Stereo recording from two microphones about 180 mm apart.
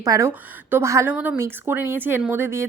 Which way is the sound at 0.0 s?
15° right (ahead or behind).